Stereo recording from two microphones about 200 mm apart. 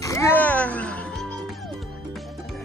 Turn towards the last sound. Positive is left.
turn(degrees=5)  # may be behind; listen again after turning